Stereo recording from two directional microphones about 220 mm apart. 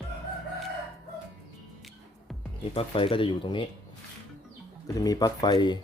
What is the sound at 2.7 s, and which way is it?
Speech, 25° left (ahead or behind).